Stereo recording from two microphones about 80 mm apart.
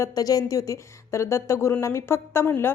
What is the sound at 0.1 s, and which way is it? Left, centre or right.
A woman's voice, left.